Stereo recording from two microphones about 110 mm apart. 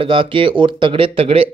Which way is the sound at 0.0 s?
50° right (ahead or behind).